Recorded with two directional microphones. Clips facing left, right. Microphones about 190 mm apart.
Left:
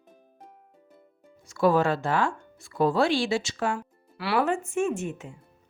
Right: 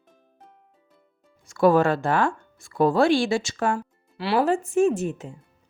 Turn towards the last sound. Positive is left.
turn(degrees=-35)  # may be behind; listen again after turning